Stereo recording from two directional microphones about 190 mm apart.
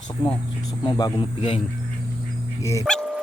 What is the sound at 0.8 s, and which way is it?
Speech, 25° left (ahead or behind).